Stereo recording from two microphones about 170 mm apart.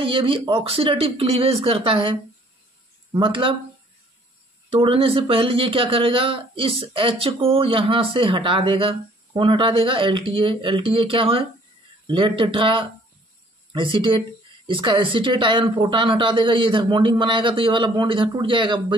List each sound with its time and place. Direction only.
0.0 s speech: 30° right (ahead or behind)
4.6 s speech: 30° right (ahead or behind)